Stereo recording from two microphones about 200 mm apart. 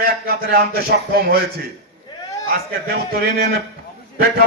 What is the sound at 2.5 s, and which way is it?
A man's voice, 50° right (ahead or behind).